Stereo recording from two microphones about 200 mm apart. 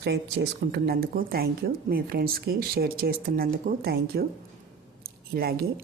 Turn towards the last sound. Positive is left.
turn(degrees=-50)  # may be behind; listen again after turning